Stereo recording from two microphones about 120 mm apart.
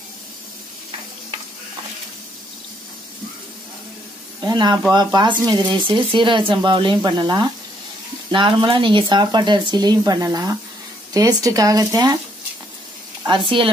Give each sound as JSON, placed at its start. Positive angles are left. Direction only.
{"t": 4.4, "sound": "speech", "side_deg": -35}
{"t": 13.3, "sound": "speech", "side_deg": -45}